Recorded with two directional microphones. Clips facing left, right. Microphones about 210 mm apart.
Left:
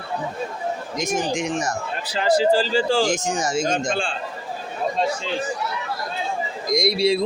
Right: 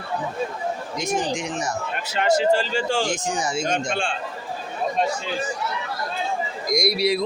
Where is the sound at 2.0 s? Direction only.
30° left (ahead or behind).